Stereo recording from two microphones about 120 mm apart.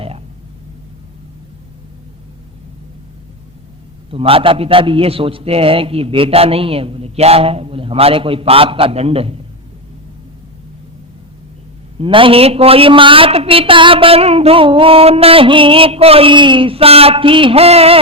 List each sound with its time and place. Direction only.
4.1 s a woman's voice: 50° right (ahead or behind)
11.9 s a woman's voice: 45° right (ahead or behind)